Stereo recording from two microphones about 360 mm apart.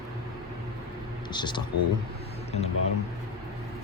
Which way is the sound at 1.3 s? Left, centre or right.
Centre.